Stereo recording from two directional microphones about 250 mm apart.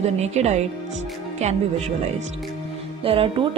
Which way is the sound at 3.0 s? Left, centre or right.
Right.